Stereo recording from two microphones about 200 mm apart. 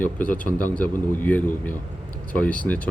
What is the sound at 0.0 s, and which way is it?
Speech, 10° left (ahead or behind).